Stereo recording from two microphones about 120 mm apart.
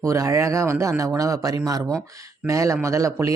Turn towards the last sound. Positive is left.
turn(degrees=-25)  # may be behind; listen again after turning